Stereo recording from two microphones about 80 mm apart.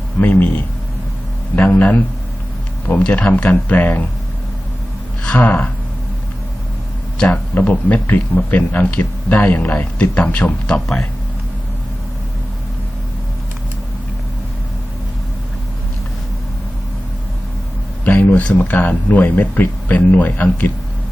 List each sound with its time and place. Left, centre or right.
0.2 s a man's voice: centre
5.2 s gasp: centre
7.5 s a man's voice: centre
18.0 s a man's voice: left